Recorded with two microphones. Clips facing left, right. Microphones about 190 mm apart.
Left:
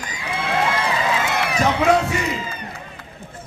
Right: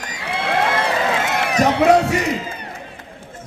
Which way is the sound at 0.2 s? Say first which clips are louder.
Right 2 dB; 65° right (ahead or behind).